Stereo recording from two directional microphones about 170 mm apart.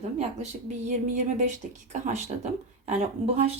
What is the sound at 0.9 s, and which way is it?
Speech, 45° right (ahead or behind).